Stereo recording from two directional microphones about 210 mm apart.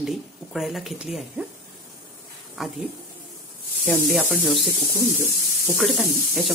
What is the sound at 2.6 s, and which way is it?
Speech, centre (ahead or behind).